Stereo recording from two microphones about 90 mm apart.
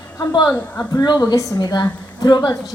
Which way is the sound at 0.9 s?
50° left (ahead or behind).